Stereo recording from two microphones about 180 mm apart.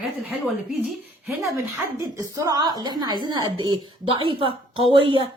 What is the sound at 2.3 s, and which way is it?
Speech, 20° right (ahead or behind).